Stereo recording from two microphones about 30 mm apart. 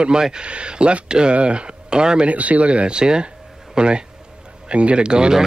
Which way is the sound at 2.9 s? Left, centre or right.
Right.